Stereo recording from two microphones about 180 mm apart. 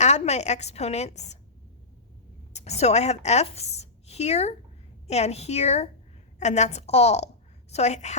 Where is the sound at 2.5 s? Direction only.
40° left (ahead or behind).